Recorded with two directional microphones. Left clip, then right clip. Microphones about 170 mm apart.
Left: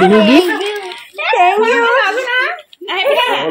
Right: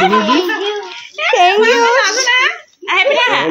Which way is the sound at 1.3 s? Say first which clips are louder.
Right 1 dB; 25° right (ahead or behind).